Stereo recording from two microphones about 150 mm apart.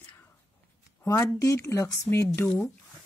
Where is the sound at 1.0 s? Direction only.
20° left (ahead or behind).